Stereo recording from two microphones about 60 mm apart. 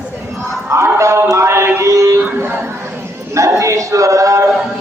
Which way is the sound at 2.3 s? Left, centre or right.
Right.